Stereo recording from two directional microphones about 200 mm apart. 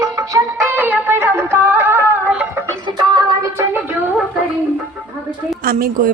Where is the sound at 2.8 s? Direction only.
20° right (ahead or behind).